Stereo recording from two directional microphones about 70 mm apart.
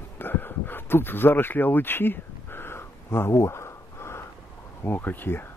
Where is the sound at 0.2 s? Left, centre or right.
Left.